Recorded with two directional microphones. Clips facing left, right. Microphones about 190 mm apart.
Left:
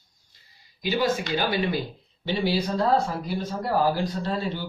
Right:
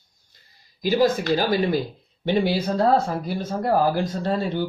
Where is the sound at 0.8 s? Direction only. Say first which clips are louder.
Right 5 dB; 40° right (ahead or behind).